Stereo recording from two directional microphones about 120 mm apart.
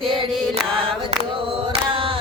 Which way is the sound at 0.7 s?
50° right (ahead or behind).